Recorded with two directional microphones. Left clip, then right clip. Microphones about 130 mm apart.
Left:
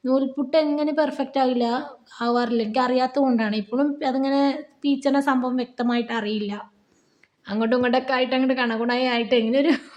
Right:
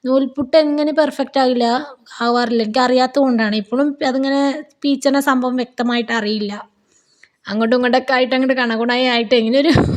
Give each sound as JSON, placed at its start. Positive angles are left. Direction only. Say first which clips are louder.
{"t": 0.0, "sound": "a woman's voice", "louder": "right 6 dB", "side_deg": -45}